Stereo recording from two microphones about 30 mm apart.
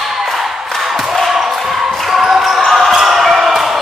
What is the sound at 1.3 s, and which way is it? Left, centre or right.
Basketball bounce, centre.